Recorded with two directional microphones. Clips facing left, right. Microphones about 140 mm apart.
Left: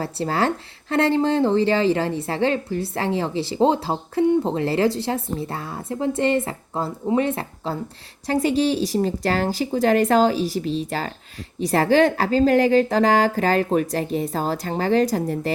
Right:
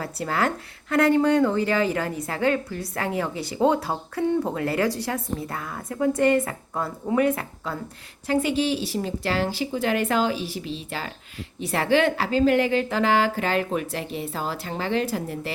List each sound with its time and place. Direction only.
0.0 s a woman's voice: 30° left (ahead or behind)